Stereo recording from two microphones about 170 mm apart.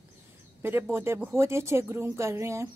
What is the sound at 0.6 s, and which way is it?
Speech, 15° right (ahead or behind).